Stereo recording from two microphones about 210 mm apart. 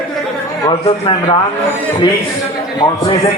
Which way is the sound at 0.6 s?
25° left (ahead or behind).